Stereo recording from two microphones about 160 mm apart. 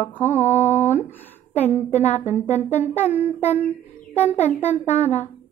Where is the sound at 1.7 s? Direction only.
45° left (ahead or behind).